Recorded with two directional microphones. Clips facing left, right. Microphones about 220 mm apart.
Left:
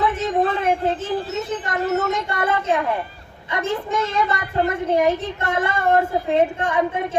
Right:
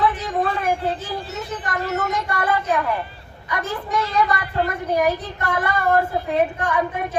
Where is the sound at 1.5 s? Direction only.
25° left (ahead or behind).